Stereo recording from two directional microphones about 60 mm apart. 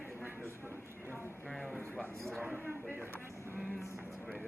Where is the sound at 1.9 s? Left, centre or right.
Centre.